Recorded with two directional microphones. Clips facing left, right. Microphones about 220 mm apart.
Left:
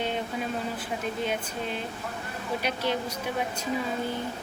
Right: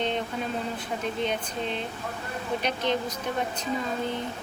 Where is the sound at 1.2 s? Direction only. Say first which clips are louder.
Right 1 dB; 5° left (ahead or behind).